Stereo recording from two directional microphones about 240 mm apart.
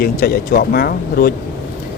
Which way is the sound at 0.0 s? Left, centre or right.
Left.